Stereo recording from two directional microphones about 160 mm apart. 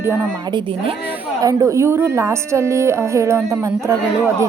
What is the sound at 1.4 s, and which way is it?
A woman's voice, 20° right (ahead or behind).